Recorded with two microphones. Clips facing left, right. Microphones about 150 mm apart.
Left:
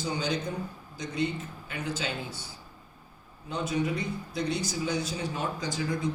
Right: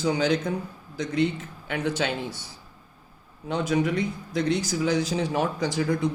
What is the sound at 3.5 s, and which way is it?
A man's voice, 90° right.